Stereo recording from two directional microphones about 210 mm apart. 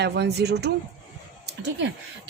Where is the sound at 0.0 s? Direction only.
50° right (ahead or behind).